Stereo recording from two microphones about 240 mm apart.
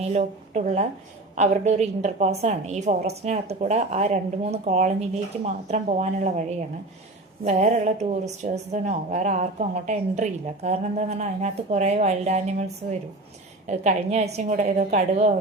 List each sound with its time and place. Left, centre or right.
0.0 s speech: right
7.4 s speech: right